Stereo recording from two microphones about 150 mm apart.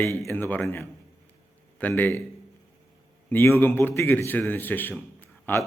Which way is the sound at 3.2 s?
15° left (ahead or behind).